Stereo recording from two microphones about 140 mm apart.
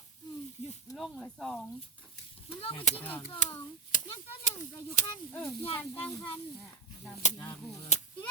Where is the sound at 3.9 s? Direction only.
70° left (ahead or behind).